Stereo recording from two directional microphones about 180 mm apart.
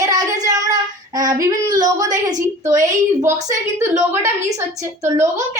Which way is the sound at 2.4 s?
15° right (ahead or behind).